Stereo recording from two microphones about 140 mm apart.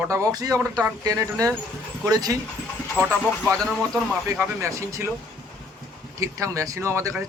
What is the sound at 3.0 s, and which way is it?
Speech, 15° right (ahead or behind).